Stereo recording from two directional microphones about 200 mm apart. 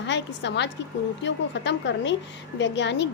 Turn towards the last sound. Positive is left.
turn(degrees=60)  # may be behind; listen again after turning